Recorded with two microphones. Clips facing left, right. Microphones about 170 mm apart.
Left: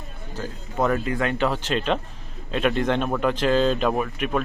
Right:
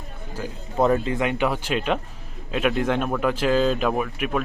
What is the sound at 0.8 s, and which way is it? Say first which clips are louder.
Speech: right 2 dB; 25° right (ahead or behind).